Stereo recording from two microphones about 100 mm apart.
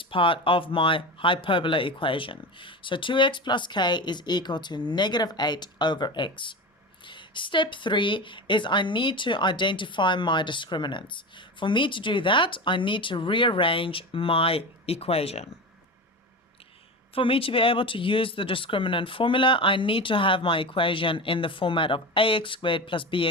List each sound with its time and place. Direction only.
0.0 s speech: 60° left (ahead or behind); by 15.4 s 85° left
17.2 s speech: 65° left (ahead or behind)